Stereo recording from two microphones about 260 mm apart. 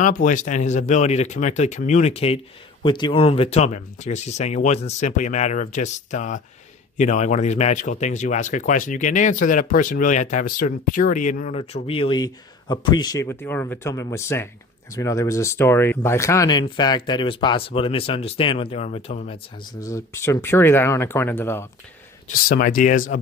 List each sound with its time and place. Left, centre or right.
0.0 s speech: left
19.8 s speech: centre
22.6 s speech: left